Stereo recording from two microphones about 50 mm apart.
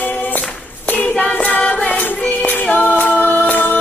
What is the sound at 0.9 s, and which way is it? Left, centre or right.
Hands, left.